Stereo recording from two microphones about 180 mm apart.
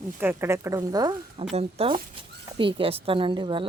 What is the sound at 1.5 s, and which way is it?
A woman's voice, 35° right (ahead or behind).